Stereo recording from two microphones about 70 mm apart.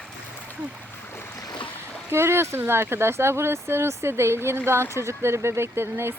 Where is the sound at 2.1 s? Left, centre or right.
Right.